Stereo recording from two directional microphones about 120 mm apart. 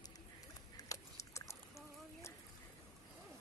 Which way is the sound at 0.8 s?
25° left (ahead or behind).